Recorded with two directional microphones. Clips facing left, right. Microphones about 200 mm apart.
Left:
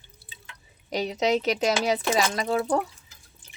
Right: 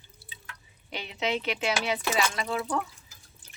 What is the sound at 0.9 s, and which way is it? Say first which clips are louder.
Speech: left 7 dB; 40° left (ahead or behind).